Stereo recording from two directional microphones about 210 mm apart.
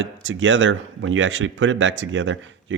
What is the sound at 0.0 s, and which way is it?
Speech, 65° right (ahead or behind).